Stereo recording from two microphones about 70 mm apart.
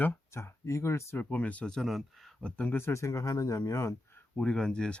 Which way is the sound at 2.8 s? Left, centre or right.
Left.